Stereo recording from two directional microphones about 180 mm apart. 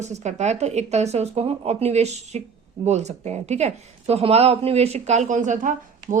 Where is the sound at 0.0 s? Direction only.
40° right (ahead or behind).